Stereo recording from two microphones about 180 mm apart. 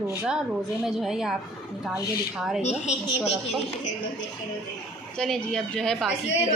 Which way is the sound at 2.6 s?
35° left (ahead or behind).